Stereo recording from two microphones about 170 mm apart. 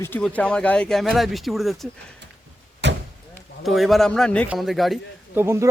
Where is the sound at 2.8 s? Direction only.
90° right.